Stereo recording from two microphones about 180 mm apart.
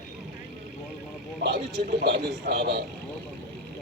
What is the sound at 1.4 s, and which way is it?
A man's voice, 65° right (ahead or behind).